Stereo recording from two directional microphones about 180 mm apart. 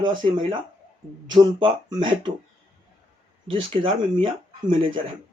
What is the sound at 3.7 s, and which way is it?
Speech, 30° right (ahead or behind).